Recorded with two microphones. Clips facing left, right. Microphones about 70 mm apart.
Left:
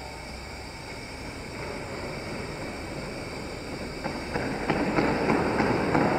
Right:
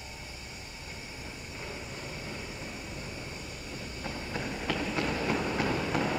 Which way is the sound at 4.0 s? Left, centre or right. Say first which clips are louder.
Left 5 dB; left.